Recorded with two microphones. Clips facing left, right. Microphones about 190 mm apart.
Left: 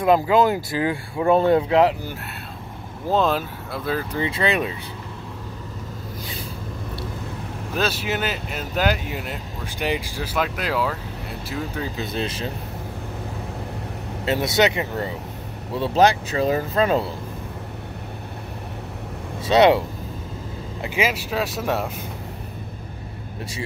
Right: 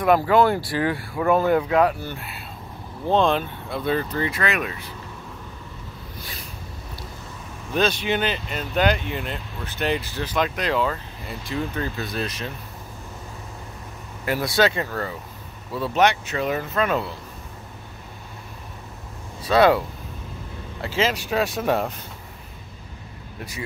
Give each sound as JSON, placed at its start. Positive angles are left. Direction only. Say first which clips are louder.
{"t": 0.0, "sound": "speech", "louder": "even", "side_deg": 20}
{"t": 1.2, "sound": "speech", "louder": "left 2 dB", "side_deg": 25}
{"t": 3.1, "sound": "speech", "louder": "right 1 dB", "side_deg": 5}
{"t": 4.2, "sound": "speech", "louder": "left 2 dB", "side_deg": 25}
{"t": 7.7, "sound": "speech", "louder": "right 3 dB", "side_deg": 5}
{"t": 12.0, "sound": "speech", "louder": "left 2 dB", "side_deg": 25}
{"t": 14.2, "sound": "speech", "louder": "left 1 dB", "side_deg": 20}
{"t": 19.4, "sound": "speech", "louder": "left 2 dB", "side_deg": 20}
{"t": 20.8, "sound": "speech", "louder": "even", "side_deg": 15}